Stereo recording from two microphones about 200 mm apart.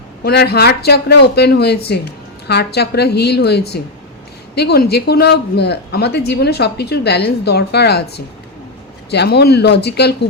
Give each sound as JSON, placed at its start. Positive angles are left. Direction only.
{"t": 0.3, "sound": "speech", "side_deg": 50}
{"t": 9.0, "sound": "speech", "side_deg": 55}